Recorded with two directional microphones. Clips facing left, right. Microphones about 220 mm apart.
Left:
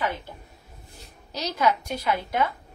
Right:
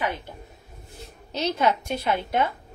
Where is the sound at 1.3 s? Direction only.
25° right (ahead or behind).